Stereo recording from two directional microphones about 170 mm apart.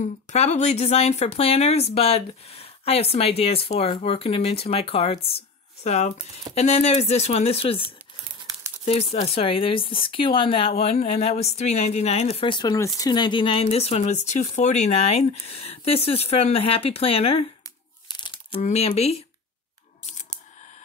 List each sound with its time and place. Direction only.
0.3 s speech: 40° left (ahead or behind)
18.0 s crumpling: 25° left (ahead or behind)
18.6 s speech: 40° left (ahead or behind)
20.1 s scissors: 40° left (ahead or behind)